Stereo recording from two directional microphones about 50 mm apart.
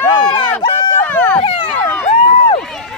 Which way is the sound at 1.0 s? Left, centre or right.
Left.